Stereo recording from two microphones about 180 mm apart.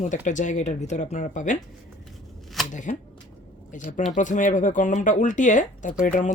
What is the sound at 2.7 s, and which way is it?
Speech, 45° left (ahead or behind).